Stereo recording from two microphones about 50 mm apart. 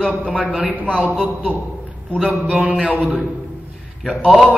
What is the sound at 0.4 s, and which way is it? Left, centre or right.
A man's voice, right.